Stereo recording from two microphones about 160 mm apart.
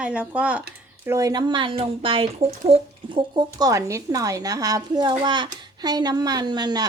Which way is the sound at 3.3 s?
25° right (ahead or behind).